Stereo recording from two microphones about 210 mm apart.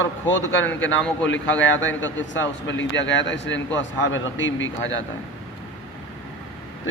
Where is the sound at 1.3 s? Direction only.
60° left (ahead or behind).